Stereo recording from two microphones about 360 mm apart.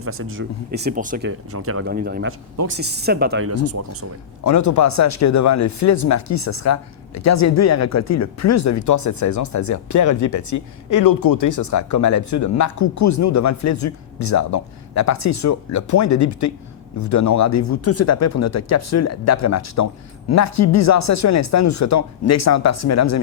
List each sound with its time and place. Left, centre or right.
0.0 s speech: right
4.4 s speech: left